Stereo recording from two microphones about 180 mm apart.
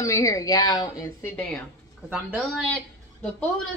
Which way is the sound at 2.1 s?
10° right (ahead or behind).